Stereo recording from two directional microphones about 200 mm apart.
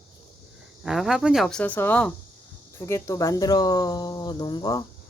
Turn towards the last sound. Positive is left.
turn(degrees=20)  # may be behind; listen again after turning